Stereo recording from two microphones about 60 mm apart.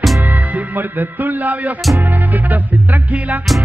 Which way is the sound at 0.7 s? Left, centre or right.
Right.